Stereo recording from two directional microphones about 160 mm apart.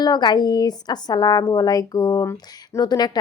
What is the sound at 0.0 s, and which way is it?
A woman's voice, 25° left (ahead or behind).